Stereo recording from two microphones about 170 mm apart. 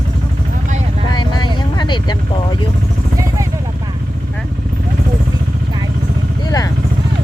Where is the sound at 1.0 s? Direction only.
25° left (ahead or behind).